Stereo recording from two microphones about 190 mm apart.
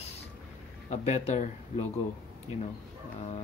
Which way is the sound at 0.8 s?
35° left (ahead or behind).